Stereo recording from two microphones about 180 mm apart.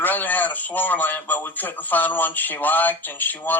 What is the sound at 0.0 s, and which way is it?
Speech, 10° left (ahead or behind).